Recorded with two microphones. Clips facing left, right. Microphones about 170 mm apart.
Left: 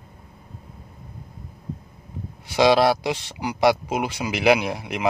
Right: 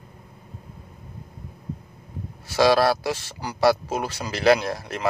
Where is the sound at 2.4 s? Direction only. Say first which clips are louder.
Left 1 dB; 20° left (ahead or behind).